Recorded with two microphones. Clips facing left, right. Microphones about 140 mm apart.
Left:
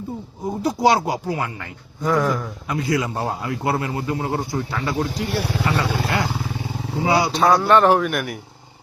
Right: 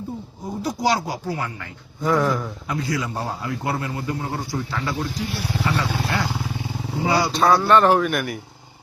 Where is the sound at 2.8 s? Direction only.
25° left (ahead or behind).